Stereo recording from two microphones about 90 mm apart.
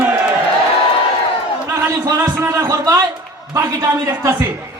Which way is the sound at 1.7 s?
30° right (ahead or behind).